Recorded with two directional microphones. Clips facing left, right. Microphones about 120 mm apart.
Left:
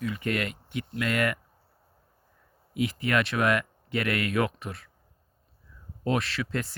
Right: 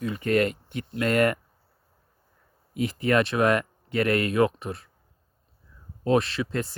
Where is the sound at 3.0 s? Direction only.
35° right (ahead or behind).